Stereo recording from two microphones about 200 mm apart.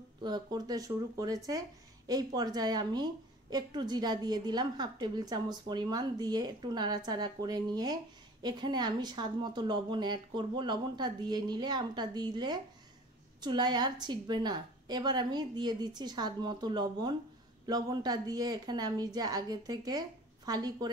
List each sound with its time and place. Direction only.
0.2 s a woman's voice: 20° right (ahead or behind)